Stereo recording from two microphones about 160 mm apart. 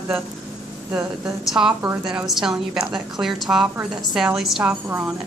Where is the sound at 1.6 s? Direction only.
10° right (ahead or behind).